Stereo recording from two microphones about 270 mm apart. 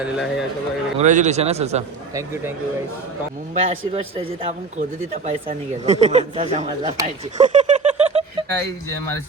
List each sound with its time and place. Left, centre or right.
0.0 s a man's voice: centre
0.9 s speech: right
2.1 s speech: centre
3.5 s speech: right
6.9 s a sound: right
8.5 s speech: centre